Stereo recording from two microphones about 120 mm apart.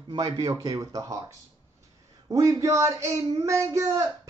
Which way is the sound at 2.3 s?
25° right (ahead or behind).